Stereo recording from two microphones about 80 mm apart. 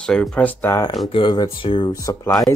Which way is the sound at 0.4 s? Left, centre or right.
Centre.